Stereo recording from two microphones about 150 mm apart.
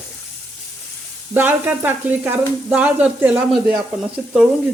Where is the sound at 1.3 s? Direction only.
15° right (ahead or behind).